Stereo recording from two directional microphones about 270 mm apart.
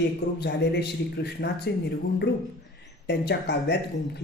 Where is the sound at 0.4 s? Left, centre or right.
Left.